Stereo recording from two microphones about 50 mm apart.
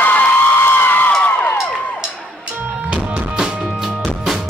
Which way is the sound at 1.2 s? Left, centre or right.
Left.